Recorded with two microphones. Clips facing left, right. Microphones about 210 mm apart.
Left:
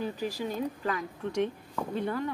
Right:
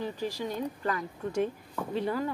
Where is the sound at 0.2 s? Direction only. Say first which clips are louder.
Left 1 dB; 10° left (ahead or behind).